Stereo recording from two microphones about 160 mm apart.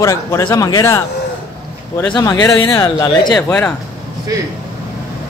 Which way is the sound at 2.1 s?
25° left (ahead or behind).